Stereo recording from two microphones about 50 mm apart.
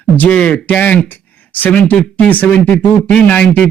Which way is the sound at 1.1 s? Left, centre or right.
Left.